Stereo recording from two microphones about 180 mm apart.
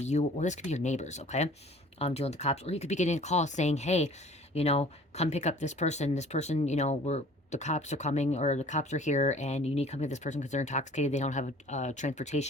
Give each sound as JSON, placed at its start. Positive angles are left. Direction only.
{"t": 0.0, "sound": "speech", "side_deg": 40}